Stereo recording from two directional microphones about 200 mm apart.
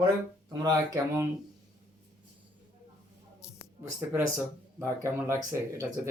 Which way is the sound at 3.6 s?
10° right (ahead or behind).